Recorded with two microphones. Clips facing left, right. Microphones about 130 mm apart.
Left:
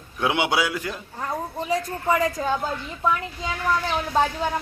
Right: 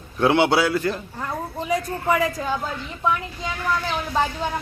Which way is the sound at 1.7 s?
15° right (ahead or behind).